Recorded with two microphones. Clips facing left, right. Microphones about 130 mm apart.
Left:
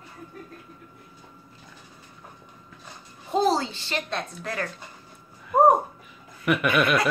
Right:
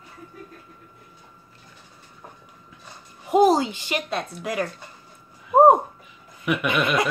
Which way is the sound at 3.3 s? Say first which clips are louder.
Right 5 dB; 15° right (ahead or behind).